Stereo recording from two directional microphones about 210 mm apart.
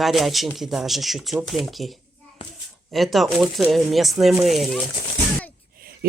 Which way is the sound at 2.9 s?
Centre (ahead or behind).